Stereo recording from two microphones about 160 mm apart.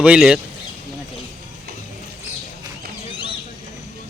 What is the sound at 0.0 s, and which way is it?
Speech, 5° right (ahead or behind).